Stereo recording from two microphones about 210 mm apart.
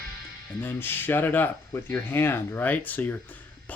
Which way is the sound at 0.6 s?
10° left (ahead or behind).